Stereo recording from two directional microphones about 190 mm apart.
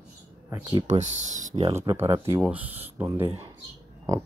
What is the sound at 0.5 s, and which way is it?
Speech, 15° right (ahead or behind).